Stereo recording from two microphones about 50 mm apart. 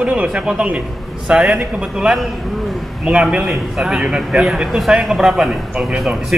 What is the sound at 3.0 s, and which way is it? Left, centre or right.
Speech, right.